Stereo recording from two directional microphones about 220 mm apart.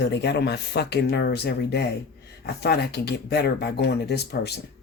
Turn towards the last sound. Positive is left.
turn(degrees=50)  # may be behind; listen again after turning